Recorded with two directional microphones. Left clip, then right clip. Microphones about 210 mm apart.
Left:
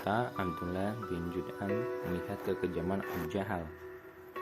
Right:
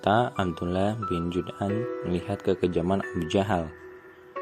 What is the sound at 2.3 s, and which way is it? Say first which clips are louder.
Speech: right 12 dB; 35° right (ahead or behind).